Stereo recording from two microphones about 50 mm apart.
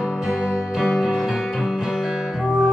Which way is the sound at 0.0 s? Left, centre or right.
Centre.